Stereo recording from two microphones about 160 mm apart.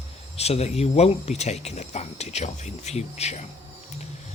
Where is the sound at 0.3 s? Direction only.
40° left (ahead or behind).